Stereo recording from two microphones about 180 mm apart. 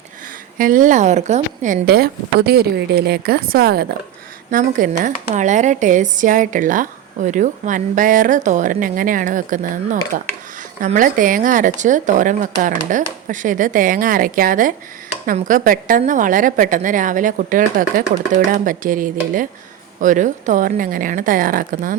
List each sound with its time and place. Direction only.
0.6 s speech: 50° right (ahead or behind)
4.5 s a woman's voice: 45° right (ahead or behind)